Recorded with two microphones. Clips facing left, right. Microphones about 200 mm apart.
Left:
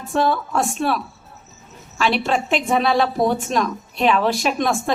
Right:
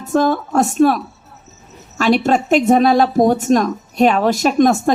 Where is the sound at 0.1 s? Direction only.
45° right (ahead or behind).